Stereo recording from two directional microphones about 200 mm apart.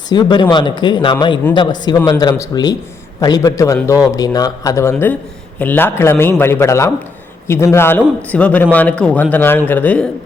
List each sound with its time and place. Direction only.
0.1 s a man's voice: 20° left (ahead or behind)